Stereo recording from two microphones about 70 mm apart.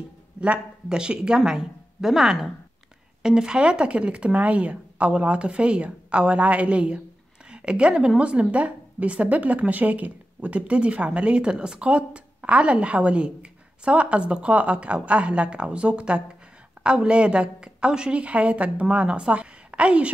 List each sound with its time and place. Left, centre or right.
0.4 s a woman's voice: centre